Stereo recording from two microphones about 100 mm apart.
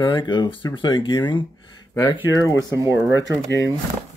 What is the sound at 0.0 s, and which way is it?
Speech, 50° left (ahead or behind).